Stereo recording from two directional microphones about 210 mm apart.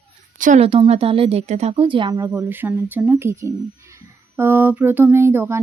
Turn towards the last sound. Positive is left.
turn(degrees=-10)  # may be behind; listen again after turning